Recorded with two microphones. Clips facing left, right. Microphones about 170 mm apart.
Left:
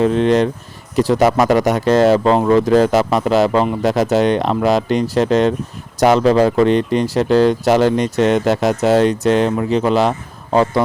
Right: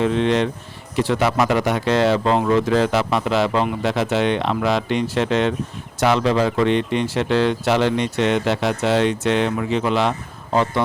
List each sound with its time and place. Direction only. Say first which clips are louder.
0.0 s speech: left 5 dB; 40° left (ahead or behind)